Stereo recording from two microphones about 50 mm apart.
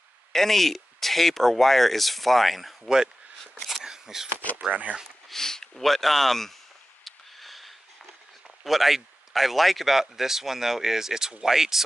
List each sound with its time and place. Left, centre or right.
0.3 s speech: centre
3.8 s a sound: centre
4.6 s speech: right
5.3 s speech: centre
7.1 s a sound: centre
8.6 s speech: centre